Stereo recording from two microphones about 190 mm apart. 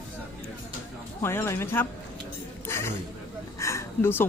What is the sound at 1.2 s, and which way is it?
Speech, 15° left (ahead or behind).